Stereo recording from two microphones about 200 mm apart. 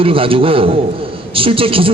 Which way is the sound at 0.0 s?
25° right (ahead or behind).